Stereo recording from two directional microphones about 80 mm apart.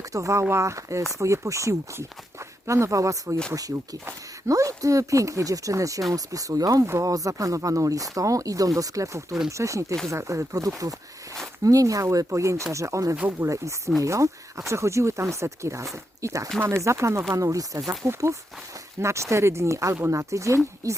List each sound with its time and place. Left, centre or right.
0.1 s speech: right